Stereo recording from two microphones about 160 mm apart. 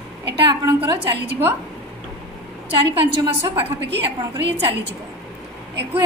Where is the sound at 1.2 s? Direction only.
15° right (ahead or behind).